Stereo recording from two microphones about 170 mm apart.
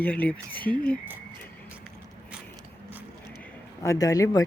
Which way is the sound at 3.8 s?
20° left (ahead or behind).